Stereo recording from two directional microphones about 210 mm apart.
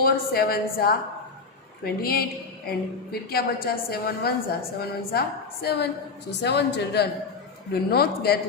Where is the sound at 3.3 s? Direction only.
45° left (ahead or behind).